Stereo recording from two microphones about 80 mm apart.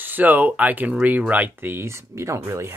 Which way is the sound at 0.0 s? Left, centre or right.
Right.